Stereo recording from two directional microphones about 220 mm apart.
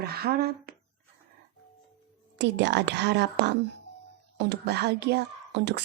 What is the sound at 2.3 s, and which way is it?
A woman's voice, 50° right (ahead or behind).